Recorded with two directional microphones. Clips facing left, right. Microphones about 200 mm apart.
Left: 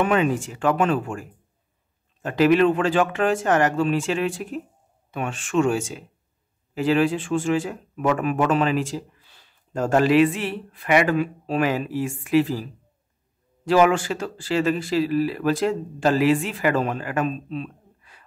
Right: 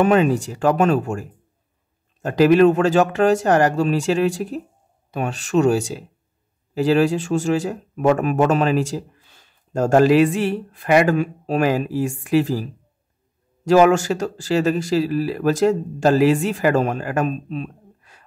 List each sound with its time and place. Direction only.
0.0 s speech: 40° right (ahead or behind)
2.2 s speech: 40° right (ahead or behind)
13.7 s speech: 45° right (ahead or behind)